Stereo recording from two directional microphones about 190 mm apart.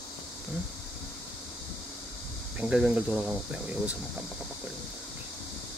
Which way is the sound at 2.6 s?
5° right (ahead or behind).